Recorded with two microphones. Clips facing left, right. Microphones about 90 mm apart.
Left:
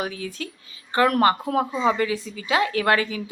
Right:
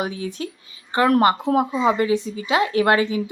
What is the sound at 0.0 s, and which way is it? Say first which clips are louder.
A woman's voice: right 3 dB; 25° right (ahead or behind).